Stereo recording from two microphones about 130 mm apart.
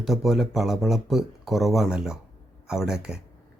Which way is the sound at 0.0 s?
Centre (ahead or behind).